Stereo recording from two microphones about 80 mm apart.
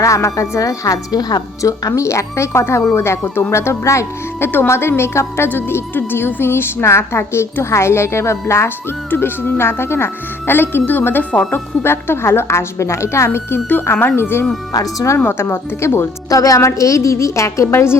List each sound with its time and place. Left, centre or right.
0.0 s a woman's voice: left
1.9 s speech: left; by 11.6 s centre
11.8 s speech: left
14.7 s a woman's voice: left
15.2 s speech: left
16.3 s speech: left